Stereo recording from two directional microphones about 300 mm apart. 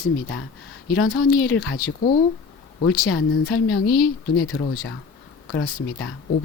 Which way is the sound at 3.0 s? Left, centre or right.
Left.